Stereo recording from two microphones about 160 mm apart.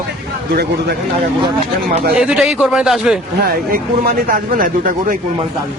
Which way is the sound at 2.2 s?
5° right (ahead or behind).